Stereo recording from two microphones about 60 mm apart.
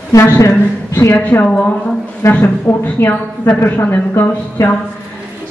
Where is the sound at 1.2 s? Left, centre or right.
Left.